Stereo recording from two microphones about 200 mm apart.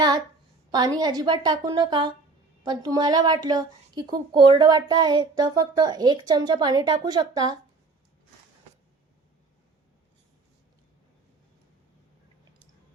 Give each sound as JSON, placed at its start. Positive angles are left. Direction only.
{"t": 0.7, "sound": "a woman's voice", "side_deg": -20}